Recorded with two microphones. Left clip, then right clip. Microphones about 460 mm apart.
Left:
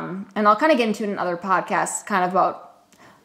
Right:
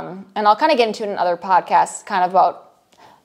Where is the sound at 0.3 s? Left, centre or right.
Right.